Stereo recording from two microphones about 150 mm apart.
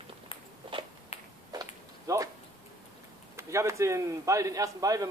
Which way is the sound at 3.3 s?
20° right (ahead or behind).